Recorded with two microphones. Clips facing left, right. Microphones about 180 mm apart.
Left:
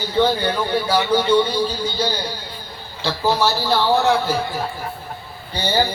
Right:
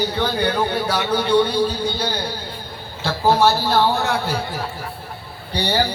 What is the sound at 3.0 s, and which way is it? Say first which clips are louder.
A man's voice: right 3 dB; 50° right (ahead or behind).